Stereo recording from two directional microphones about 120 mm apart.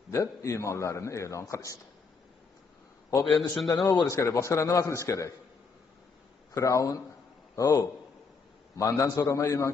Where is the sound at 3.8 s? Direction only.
25° left (ahead or behind).